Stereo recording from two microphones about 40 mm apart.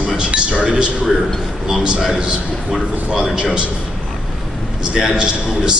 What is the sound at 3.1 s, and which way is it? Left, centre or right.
Speech, right.